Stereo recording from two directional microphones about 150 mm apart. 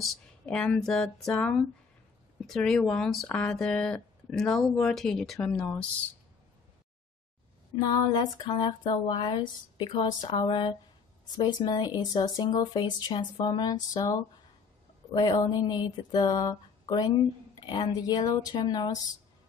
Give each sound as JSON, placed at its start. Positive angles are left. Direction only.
{"t": 0.0, "sound": "speech", "side_deg": 5}
{"t": 7.8, "sound": "speech", "side_deg": 30}